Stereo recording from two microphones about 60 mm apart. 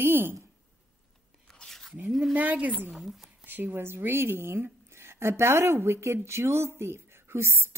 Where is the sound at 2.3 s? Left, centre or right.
Right.